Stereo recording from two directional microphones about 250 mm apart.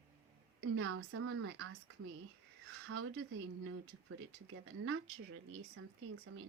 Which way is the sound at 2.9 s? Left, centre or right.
Right.